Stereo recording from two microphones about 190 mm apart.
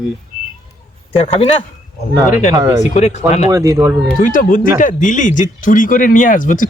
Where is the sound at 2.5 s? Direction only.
15° right (ahead or behind).